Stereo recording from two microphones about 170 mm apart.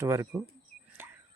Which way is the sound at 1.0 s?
10° right (ahead or behind).